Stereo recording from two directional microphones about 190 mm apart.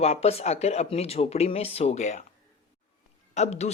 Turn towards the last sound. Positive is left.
turn(degrees=35)  # may be behind; listen again after turning